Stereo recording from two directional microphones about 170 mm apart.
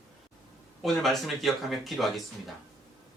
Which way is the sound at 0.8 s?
Centre (ahead or behind).